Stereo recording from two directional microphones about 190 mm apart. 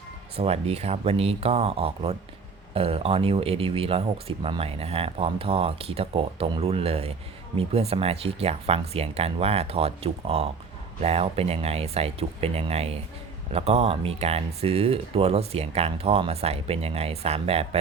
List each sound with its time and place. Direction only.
0.3 s speech: 30° right (ahead or behind)